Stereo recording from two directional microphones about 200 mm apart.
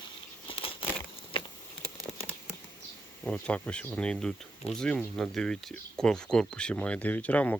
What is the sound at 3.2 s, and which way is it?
Speech, 5° left (ahead or behind).